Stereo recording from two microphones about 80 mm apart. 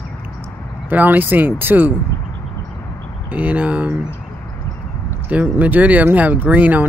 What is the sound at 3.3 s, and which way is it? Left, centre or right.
Speech, centre.